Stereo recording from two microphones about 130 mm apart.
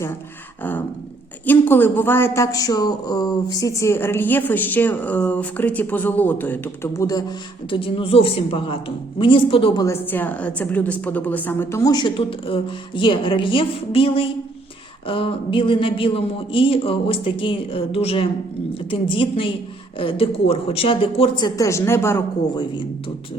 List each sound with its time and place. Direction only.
1.5 s speech: 15° left (ahead or behind)
7.7 s speech: 45° left (ahead or behind)
9.8 s a woman's voice: 20° left (ahead or behind)